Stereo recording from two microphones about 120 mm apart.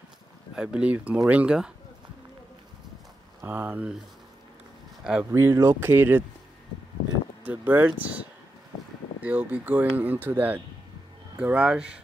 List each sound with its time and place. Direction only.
0.6 s speech: 10° right (ahead or behind)
3.3 s speech: 20° right (ahead or behind)
5.3 s speech: 25° right (ahead or behind)
7.4 s speech: 15° right (ahead or behind)